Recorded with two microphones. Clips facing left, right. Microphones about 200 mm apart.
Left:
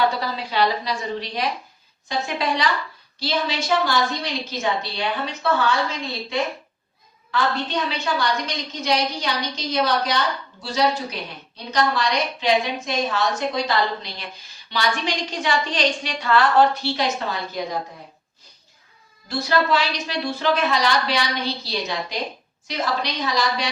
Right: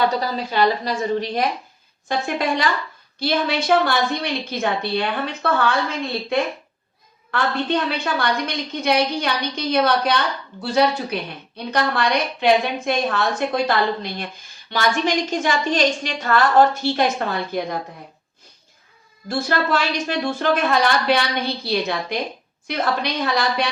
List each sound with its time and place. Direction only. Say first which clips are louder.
0.2 s a woman's voice: right 2 dB; 45° right (ahead or behind)
19.3 s a woman's voice: even; 50° right (ahead or behind)